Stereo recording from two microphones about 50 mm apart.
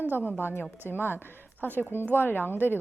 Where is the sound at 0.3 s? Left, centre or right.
Left.